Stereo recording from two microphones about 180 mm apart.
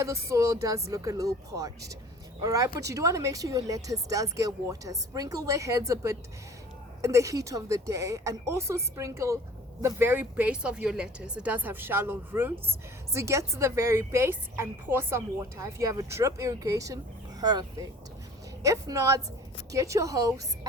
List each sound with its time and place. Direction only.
0.0 s a woman's voice: 15° right (ahead or behind)